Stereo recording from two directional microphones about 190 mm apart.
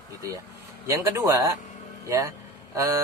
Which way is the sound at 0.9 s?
15° right (ahead or behind).